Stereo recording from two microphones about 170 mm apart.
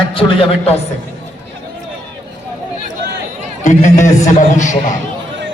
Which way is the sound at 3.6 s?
45° left (ahead or behind).